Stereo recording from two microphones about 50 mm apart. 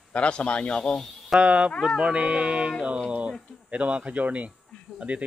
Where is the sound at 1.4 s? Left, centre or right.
Right.